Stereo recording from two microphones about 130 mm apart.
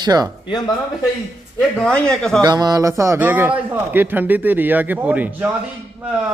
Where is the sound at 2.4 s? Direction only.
30° right (ahead or behind); by 5.5 s 10° right (ahead or behind).